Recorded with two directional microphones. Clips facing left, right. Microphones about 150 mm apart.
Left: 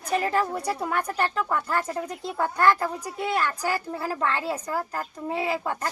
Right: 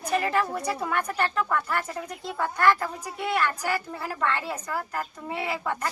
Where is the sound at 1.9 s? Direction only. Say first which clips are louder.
Left 3 dB; 35° left (ahead or behind).